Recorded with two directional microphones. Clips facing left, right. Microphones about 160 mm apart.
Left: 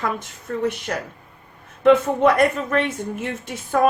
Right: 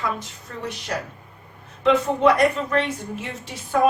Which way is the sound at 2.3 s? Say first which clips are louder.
Left 1 dB; 55° left (ahead or behind).